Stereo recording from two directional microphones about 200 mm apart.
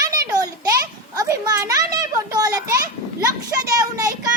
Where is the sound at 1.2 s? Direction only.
15° right (ahead or behind).